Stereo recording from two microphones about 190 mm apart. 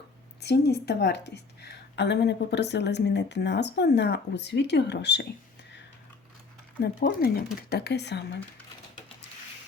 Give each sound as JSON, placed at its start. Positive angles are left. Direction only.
{"t": 0.4, "sound": "speech", "side_deg": 60}
{"t": 6.8, "sound": "speech", "side_deg": 55}